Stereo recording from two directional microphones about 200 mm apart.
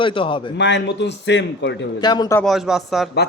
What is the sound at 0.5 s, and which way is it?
Speech, 60° left (ahead or behind).